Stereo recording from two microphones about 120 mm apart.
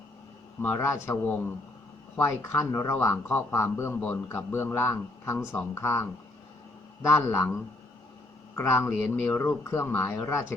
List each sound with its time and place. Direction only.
0.6 s speech: 20° left (ahead or behind)